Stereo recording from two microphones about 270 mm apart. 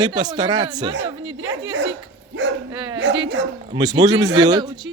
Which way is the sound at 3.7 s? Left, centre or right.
Centre.